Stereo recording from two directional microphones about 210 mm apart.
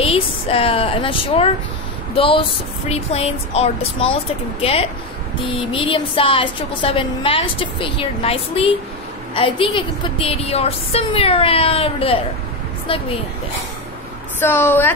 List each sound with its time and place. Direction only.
0.0 s a woman's voice: 25° left (ahead or behind)
14.4 s a woman's voice: 10° left (ahead or behind)